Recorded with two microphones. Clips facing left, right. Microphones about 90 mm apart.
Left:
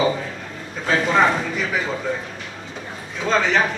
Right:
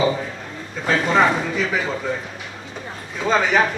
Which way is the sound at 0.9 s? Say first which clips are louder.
Even; centre (ahead or behind).